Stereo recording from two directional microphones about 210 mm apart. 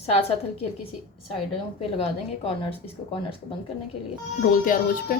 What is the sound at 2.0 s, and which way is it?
Speech, 25° left (ahead or behind).